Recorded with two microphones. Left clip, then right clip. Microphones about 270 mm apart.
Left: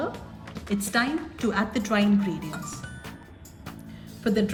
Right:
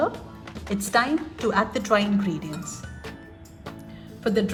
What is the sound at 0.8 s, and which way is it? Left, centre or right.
Speech, centre.